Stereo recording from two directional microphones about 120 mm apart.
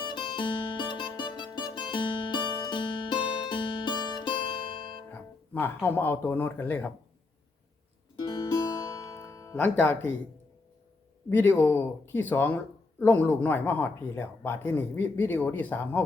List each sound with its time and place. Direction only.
0.1 s music: 40° left (ahead or behind)
5.1 s speech: 15° left (ahead or behind)
8.2 s music: 30° left (ahead or behind)
9.6 s speech: 15° left (ahead or behind)
11.3 s speech: 20° left (ahead or behind)